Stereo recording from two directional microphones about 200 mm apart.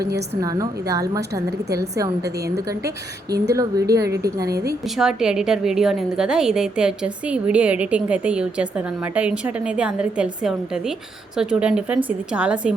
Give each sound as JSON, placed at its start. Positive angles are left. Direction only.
{"t": 0.4, "sound": "a woman's voice", "side_deg": -15}
{"t": 4.9, "sound": "a woman's voice", "side_deg": -5}